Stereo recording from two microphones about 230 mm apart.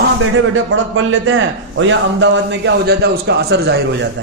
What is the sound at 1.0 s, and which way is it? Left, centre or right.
A man's voice, right.